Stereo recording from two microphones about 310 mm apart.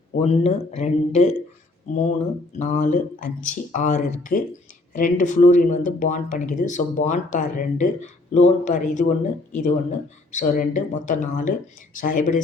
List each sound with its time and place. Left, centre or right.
0.2 s speech: centre
2.6 s speech: left